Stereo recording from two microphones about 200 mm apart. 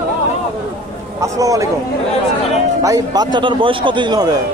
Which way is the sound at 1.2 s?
15° right (ahead or behind).